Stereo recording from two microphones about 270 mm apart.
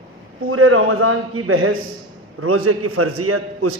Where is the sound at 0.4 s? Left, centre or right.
Right.